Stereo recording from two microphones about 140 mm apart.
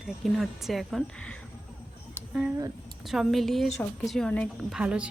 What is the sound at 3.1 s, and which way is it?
Speech, centre (ahead or behind).